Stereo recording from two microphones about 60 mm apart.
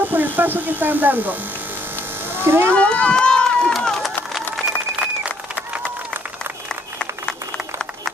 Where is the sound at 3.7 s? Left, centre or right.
Centre.